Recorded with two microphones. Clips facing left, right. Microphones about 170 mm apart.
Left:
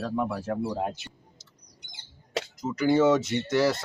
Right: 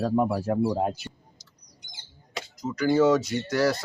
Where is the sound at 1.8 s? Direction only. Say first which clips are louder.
Right 3 dB; 60° left (ahead or behind).